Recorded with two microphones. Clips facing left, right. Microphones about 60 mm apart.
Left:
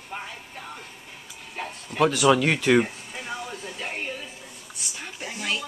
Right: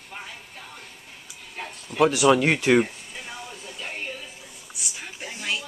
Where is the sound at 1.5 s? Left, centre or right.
Centre.